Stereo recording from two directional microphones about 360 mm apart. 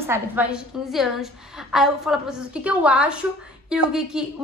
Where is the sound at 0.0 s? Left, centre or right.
Centre.